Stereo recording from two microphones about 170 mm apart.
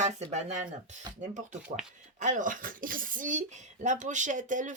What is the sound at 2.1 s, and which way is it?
Speech, 50° right (ahead or behind).